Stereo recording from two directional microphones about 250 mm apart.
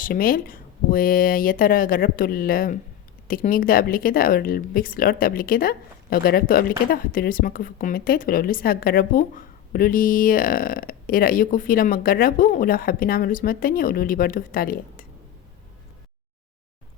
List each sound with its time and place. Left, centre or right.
0.0 s speech: left